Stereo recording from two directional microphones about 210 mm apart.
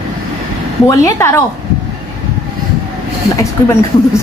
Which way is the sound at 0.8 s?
15° left (ahead or behind).